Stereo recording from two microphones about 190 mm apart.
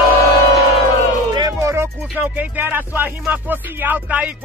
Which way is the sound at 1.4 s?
15° right (ahead or behind).